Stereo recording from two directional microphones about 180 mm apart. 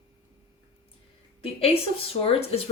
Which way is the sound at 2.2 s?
30° left (ahead or behind).